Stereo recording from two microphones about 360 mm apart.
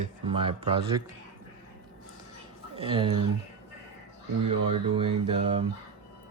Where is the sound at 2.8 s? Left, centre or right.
Centre.